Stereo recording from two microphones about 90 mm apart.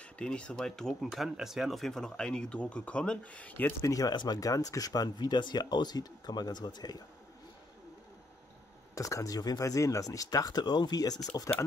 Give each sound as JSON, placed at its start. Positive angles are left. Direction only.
{"t": 0.0, "sound": "speech", "side_deg": 10}
{"t": 3.8, "sound": "speech", "side_deg": 40}
{"t": 4.1, "sound": "speech", "side_deg": 50}
{"t": 8.9, "sound": "speech", "side_deg": 35}